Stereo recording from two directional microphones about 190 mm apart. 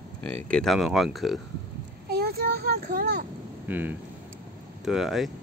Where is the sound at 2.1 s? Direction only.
55° right (ahead or behind).